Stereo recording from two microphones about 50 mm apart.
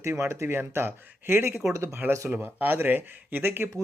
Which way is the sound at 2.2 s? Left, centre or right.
Right.